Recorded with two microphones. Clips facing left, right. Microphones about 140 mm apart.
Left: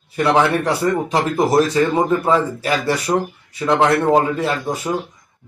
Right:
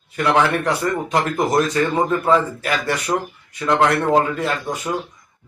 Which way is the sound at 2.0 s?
20° left (ahead or behind).